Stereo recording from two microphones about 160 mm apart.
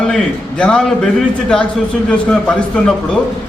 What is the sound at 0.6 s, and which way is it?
Speech, 5° left (ahead or behind).